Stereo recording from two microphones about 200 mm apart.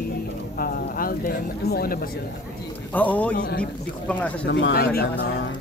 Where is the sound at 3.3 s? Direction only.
50° left (ahead or behind).